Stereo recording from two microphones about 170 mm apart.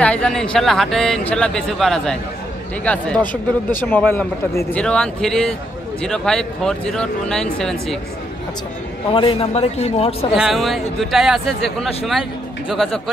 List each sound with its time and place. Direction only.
0.0 s speech: 5° left (ahead or behind)
9.1 s a man's voice: 30° left (ahead or behind)
10.3 s speech: centre (ahead or behind)